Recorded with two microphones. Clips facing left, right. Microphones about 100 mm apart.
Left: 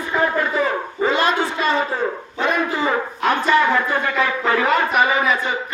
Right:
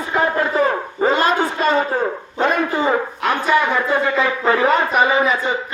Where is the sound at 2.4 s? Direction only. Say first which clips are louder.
Right 3 dB; 45° right (ahead or behind).